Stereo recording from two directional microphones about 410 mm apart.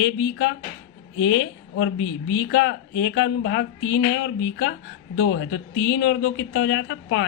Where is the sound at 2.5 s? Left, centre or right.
Left.